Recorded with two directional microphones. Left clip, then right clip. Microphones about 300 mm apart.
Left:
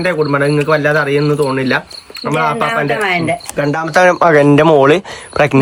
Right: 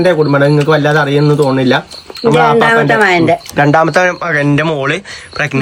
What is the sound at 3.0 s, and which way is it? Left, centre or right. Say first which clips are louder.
Speech: right 6 dB; right.